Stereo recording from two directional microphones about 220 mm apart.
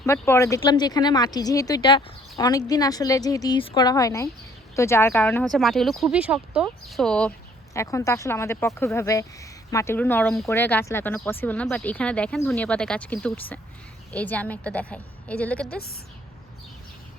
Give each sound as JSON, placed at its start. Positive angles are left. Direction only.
{"t": 0.0, "sound": "speech", "side_deg": 10}